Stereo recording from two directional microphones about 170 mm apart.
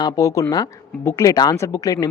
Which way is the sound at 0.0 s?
20° left (ahead or behind).